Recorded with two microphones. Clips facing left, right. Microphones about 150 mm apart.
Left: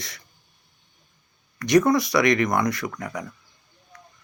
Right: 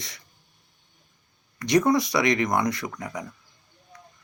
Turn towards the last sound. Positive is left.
turn(degrees=-25)  # may be behind; listen again after turning